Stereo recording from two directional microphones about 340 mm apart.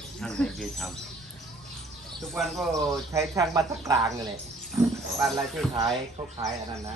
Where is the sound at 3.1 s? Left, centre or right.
Centre.